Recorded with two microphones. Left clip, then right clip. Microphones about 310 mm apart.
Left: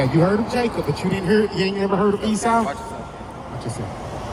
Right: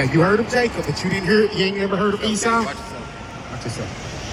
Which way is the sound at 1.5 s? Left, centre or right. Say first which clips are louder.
Even; left.